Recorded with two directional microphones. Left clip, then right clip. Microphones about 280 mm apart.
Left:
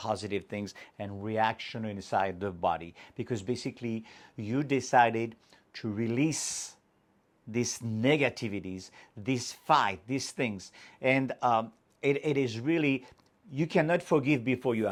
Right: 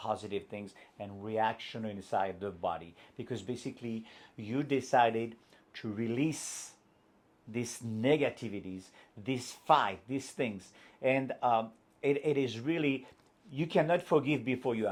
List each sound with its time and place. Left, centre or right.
0.0 s speech: left
7.5 s speech: left